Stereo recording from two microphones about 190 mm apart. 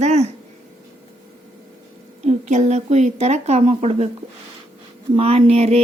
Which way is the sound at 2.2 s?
35° right (ahead or behind).